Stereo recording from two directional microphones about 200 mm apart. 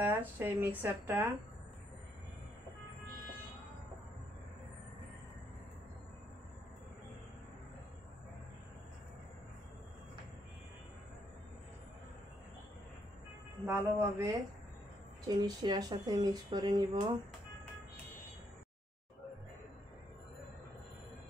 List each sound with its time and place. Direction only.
0.0 s speech: 10° right (ahead or behind)
13.7 s speech: 10° right (ahead or behind)